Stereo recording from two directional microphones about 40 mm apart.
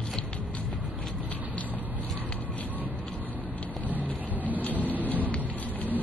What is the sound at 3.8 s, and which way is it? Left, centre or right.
Vehicle, right.